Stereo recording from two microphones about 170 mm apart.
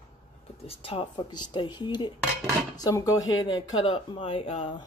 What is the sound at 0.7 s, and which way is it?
Speech, 35° left (ahead or behind).